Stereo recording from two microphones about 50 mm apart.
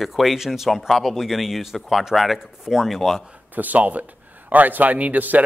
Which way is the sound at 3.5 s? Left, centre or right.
Right.